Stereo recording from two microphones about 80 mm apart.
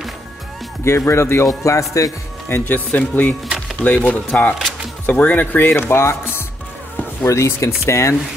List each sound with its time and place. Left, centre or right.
0.8 s speech: left
2.5 s speech: left